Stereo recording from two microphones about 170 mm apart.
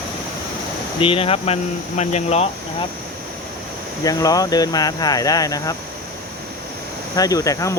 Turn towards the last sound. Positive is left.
turn(degrees=20)  # may be behind; listen again after turning